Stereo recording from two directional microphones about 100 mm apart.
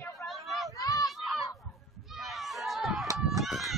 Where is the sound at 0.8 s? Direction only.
35° left (ahead or behind).